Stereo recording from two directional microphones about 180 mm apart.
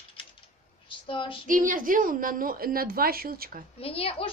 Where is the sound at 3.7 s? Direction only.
30° left (ahead or behind).